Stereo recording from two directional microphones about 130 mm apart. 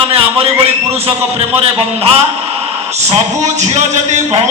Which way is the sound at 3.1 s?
55° right (ahead or behind).